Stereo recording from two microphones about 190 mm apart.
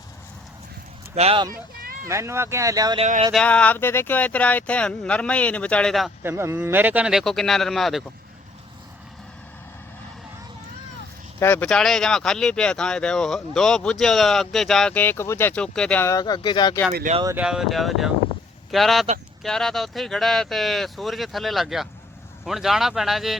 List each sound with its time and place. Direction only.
1.1 s speech: 30° right (ahead or behind)
2.0 s speech: 15° right (ahead or behind)
3.0 s speech: 35° right (ahead or behind)
3.3 s speech: 5° left (ahead or behind)
6.2 s speech: 10° right (ahead or behind)
11.3 s speech: 10° left (ahead or behind)
16.9 s speech: 45° right (ahead or behind)
17.3 s speech: 5° right (ahead or behind)